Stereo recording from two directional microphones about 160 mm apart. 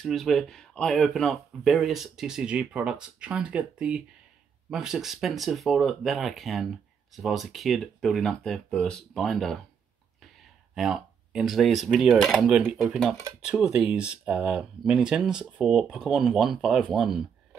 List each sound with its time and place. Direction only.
0.0 s speech: centre (ahead or behind)